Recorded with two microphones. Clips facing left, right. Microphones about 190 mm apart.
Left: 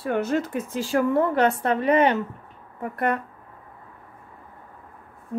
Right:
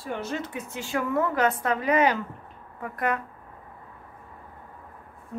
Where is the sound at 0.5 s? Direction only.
90° left.